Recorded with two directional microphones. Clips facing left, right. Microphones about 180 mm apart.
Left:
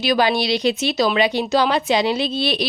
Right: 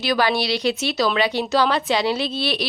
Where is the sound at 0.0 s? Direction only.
15° left (ahead or behind).